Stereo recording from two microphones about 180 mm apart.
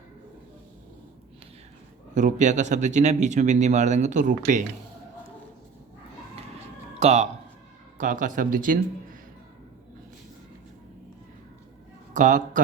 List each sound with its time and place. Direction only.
2.1 s speech: 45° right (ahead or behind)
7.0 s speech: 35° right (ahead or behind)
7.9 s speech: 45° right (ahead or behind)
12.1 s speech: 45° right (ahead or behind)